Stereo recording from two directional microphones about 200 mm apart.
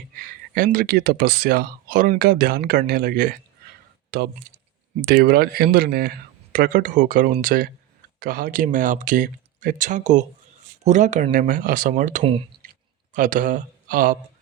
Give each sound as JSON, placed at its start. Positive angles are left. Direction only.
{"t": 0.2, "sound": "speech", "side_deg": -45}